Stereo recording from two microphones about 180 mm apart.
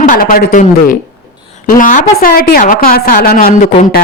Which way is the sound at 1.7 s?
45° left (ahead or behind).